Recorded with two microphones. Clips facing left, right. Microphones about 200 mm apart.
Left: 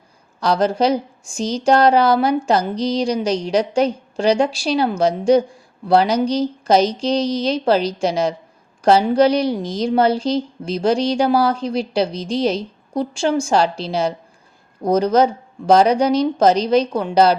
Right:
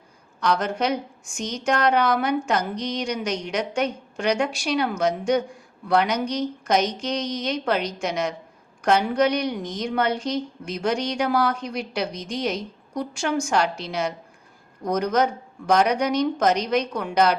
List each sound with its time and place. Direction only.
0.3 s speech: 30° left (ahead or behind)